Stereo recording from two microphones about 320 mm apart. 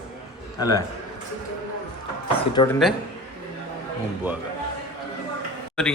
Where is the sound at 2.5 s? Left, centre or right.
Centre.